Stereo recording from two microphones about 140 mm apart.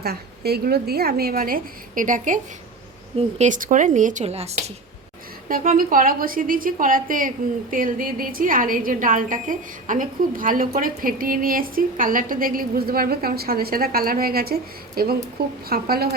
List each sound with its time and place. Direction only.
0.0 s a woman's voice: 90° right; by 4.5 s 50° right (ahead or behind)
5.5 s a woman's voice: 85° right